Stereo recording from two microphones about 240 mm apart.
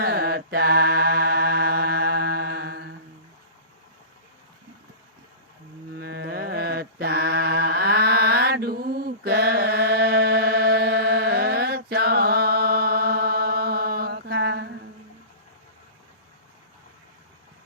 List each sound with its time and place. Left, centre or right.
0.0 s mantra: right
6.0 s mantra: right